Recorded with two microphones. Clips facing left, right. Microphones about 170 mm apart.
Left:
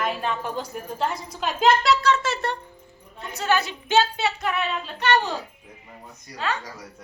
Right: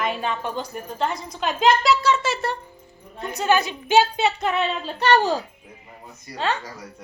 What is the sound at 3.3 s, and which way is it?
A woman's voice, 15° right (ahead or behind).